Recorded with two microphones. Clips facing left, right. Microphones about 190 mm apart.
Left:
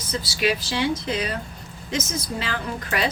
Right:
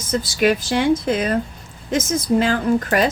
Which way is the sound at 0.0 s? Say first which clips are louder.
Right 6 dB; 50° right (ahead or behind).